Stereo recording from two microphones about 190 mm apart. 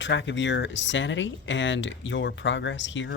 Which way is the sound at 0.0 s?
70° left (ahead or behind).